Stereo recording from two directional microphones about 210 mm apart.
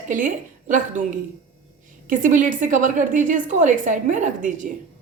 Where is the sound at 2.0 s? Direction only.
40° right (ahead or behind).